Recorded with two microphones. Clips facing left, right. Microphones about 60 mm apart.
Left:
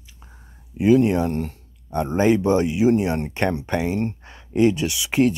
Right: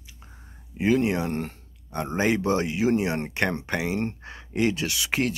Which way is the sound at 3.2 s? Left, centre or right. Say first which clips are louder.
Left 3 dB; centre.